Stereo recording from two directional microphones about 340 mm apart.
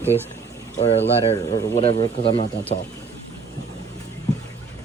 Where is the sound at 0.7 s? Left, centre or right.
Centre.